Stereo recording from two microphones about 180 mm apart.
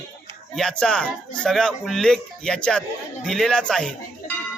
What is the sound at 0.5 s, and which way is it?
A man's voice, 5° left (ahead or behind).